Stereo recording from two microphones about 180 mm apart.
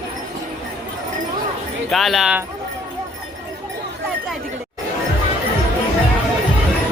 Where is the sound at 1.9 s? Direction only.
Centre (ahead or behind).